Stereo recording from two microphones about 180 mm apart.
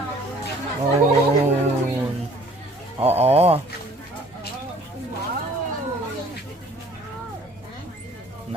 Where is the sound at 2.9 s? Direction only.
35° right (ahead or behind).